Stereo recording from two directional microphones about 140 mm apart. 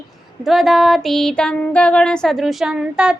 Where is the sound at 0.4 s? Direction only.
Centre (ahead or behind).